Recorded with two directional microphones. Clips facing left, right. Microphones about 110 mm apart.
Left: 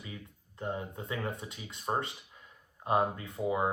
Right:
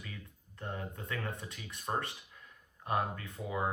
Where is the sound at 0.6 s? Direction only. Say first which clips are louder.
Left 5 dB; 20° left (ahead or behind).